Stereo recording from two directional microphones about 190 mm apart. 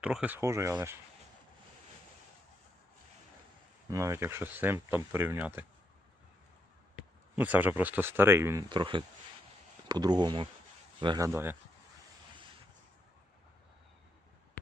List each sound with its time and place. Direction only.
0.0 s speech: 5° right (ahead or behind)
3.8 s speech: 15° right (ahead or behind)
6.9 s speech: 10° right (ahead or behind)
8.7 s speech: 25° right (ahead or behind)